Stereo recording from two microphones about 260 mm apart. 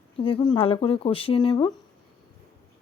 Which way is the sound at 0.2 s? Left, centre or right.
Centre.